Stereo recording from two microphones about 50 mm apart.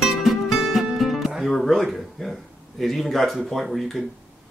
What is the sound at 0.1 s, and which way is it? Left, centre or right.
Music, centre.